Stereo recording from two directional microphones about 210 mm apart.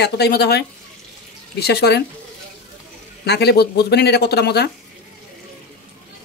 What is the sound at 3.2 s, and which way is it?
Speech, 50° left (ahead or behind).